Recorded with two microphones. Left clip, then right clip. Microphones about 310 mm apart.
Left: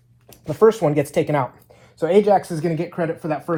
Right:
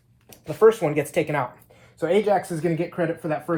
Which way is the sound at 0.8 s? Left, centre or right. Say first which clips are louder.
Left 5 dB; left.